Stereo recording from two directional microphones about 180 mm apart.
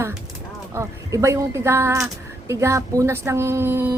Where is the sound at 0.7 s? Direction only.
15° right (ahead or behind).